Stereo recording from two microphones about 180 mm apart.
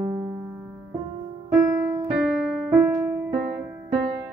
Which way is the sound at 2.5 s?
10° right (ahead or behind).